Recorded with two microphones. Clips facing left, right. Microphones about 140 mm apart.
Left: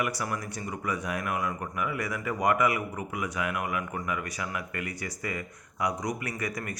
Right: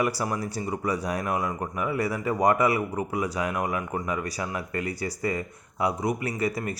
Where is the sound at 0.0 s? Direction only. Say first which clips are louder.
Right 5 dB; 30° right (ahead or behind).